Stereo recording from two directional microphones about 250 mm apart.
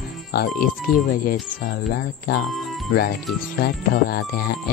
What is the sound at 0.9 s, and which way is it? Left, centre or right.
Speech, left.